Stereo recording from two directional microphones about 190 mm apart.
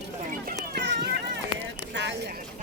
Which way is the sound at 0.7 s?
60° right (ahead or behind).